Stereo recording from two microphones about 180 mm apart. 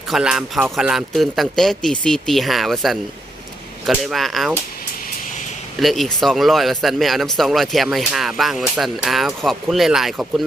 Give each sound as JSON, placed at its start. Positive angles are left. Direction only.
{"t": 0.1, "sound": "a man's voice", "side_deg": -5}
{"t": 5.8, "sound": "a man's voice", "side_deg": 0}